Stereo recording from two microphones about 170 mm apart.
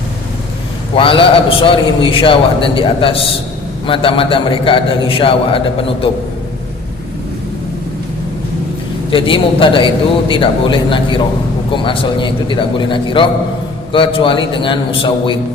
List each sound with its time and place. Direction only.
0.9 s a man's voice: 30° left (ahead or behind)
9.0 s a man's voice: 30° left (ahead or behind)